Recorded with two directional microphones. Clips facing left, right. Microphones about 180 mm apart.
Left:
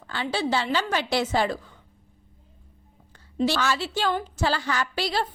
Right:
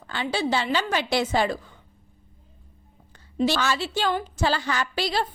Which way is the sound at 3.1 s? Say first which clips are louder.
Right 1 dB; 15° right (ahead or behind).